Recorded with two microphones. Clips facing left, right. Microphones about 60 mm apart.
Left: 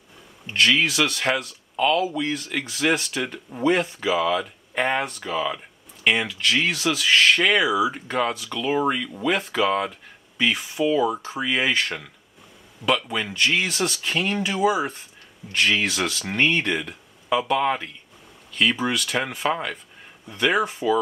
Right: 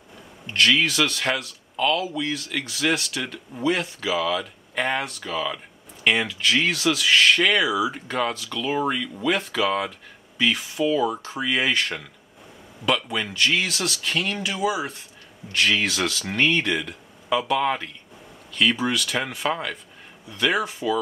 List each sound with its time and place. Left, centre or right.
0.5 s speech: centre
6.0 s speech: centre
15.5 s speech: centre